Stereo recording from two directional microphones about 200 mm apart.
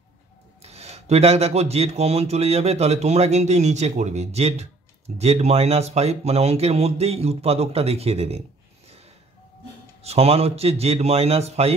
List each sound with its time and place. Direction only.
0.6 s speech: 30° right (ahead or behind)
10.0 s speech: 30° right (ahead or behind)